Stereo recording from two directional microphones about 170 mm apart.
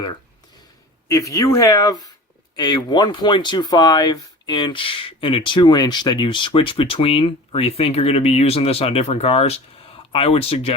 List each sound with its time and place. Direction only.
1.0 s speech: 20° left (ahead or behind); by 10.8 s 35° left (ahead or behind)